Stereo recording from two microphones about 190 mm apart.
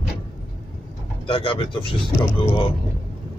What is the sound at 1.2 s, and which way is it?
Speech, 25° left (ahead or behind).